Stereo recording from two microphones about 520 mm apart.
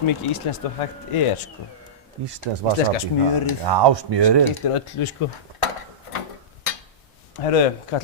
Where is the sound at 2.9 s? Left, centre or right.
Left.